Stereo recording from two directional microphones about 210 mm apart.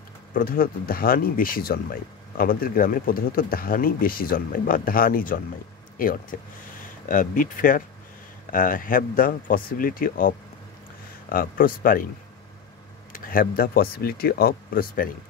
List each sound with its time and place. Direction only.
0.3 s speech: 45° left (ahead or behind)
7.1 s speech: 40° left (ahead or behind)
13.1 s speech: 40° left (ahead or behind)